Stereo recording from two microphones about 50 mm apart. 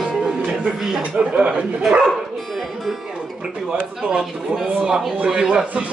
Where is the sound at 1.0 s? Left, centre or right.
Right.